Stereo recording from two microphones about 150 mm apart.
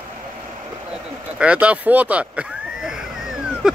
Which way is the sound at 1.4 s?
10° right (ahead or behind).